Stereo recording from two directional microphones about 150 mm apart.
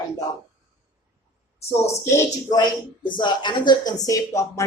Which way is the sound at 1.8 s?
20° left (ahead or behind).